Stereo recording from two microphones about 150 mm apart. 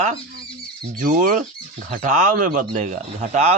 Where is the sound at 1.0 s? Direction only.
65° right (ahead or behind).